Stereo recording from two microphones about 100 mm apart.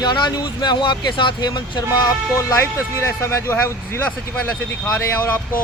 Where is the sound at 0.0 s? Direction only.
45° left (ahead or behind); by 4.1 s 25° left (ahead or behind).